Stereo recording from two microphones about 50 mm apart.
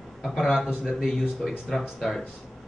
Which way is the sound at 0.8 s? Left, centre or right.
Centre.